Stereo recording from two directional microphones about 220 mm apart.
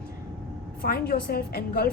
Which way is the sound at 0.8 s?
45° left (ahead or behind).